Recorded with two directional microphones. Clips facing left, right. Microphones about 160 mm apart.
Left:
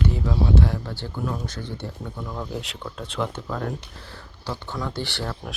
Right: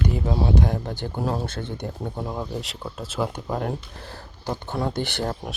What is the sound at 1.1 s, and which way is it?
Speech, 40° right (ahead or behind).